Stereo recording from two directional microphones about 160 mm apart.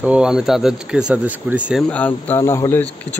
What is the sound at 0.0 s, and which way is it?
Speech, 5° right (ahead or behind).